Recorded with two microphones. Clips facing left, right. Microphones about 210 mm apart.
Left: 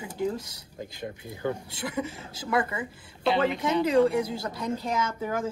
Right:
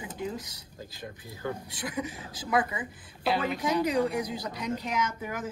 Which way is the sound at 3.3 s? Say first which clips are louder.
Left 3 dB; 25° left (ahead or behind).